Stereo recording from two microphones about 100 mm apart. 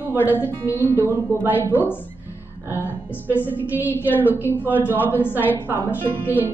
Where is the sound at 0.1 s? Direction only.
20° right (ahead or behind).